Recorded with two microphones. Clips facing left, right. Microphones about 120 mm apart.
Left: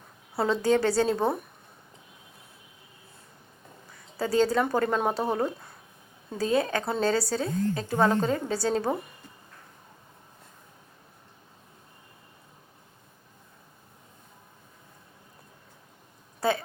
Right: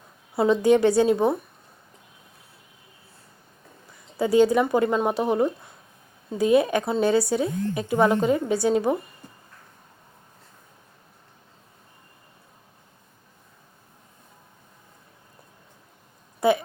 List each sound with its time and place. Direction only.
0.3 s a woman's voice: 15° right (ahead or behind)
4.2 s a woman's voice: 15° right (ahead or behind)
16.4 s a sound: 15° right (ahead or behind)